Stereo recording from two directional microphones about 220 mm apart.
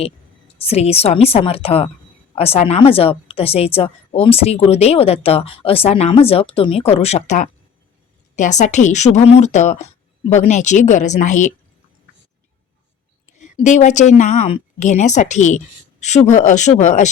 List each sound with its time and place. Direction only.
0.0 s a woman's voice: 25° left (ahead or behind)
13.3 s speech: 30° left (ahead or behind)